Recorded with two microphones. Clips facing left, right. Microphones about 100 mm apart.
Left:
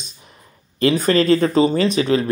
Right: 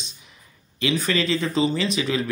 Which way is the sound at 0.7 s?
40° left (ahead or behind).